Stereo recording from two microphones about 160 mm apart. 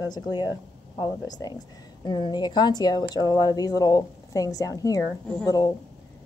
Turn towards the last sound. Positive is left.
turn(degrees=25)  # may be behind; listen again after turning